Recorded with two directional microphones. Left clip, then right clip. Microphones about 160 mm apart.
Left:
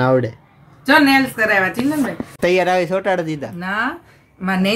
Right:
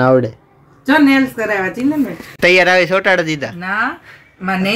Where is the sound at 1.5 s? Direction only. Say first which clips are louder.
Even; 10° left (ahead or behind).